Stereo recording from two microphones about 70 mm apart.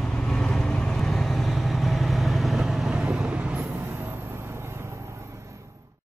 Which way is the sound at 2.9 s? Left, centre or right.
Centre.